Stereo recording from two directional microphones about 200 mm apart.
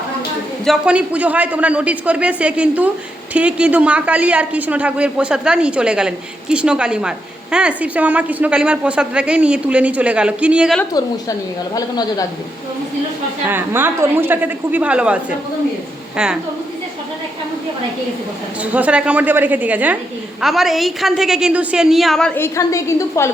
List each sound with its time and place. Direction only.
0.6 s a man's voice: 5° right (ahead or behind)
11.7 s a woman's voice: 20° left (ahead or behind)
13.5 s a man's voice: 10° right (ahead or behind)
18.6 s a man's voice: 5° right (ahead or behind)
22.4 s a woman's voice: 15° left (ahead or behind)